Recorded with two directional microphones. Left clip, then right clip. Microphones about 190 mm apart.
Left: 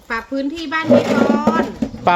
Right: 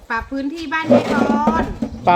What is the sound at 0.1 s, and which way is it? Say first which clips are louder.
Speech: left 1 dB; 10° right (ahead or behind).